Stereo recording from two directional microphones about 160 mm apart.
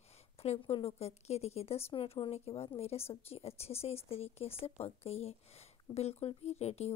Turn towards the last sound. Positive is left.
turn(degrees=40)  # may be behind; listen again after turning